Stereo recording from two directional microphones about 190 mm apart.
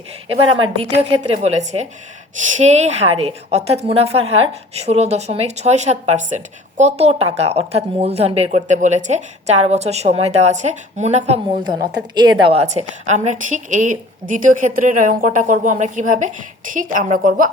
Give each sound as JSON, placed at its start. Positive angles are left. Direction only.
{"t": 0.3, "sound": "a woman's voice", "side_deg": -30}